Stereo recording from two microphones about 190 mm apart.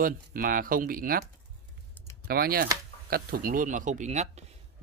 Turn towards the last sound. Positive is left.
turn(degrees=-40)  # may be behind; listen again after turning